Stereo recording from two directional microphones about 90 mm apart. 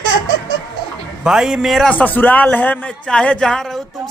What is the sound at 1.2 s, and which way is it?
Speech, 5° right (ahead or behind).